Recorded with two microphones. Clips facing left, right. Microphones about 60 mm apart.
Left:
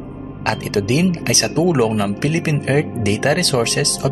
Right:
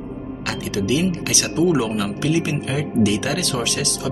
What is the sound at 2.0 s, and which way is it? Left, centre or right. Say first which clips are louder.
Speech: left 1 dB; left.